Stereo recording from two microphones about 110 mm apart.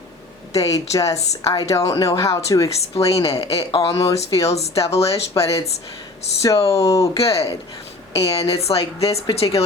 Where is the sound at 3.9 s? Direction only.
30° left (ahead or behind).